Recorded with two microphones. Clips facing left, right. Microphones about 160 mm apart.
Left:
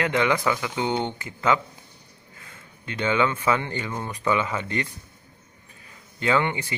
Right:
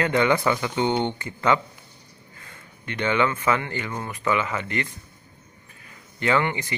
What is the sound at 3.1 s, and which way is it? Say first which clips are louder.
Speech: even; 15° left (ahead or behind).